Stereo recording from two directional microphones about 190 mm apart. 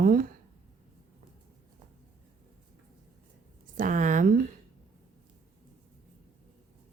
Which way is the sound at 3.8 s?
45° right (ahead or behind).